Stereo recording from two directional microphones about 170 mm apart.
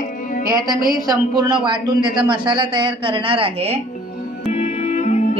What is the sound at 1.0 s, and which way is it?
Speech, 20° right (ahead or behind).